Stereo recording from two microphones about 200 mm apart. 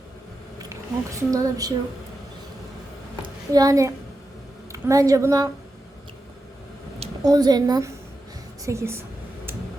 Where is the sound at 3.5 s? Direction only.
15° right (ahead or behind).